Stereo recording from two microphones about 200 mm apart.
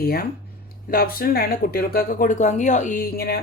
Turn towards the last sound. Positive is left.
turn(degrees=50)  # may be behind; listen again after turning